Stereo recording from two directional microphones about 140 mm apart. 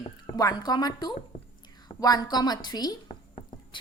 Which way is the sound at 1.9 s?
30° left (ahead or behind).